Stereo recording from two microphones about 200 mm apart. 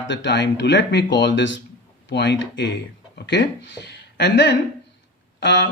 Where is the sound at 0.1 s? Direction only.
65° left (ahead or behind).